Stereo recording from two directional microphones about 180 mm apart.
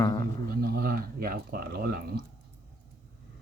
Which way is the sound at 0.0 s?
20° left (ahead or behind).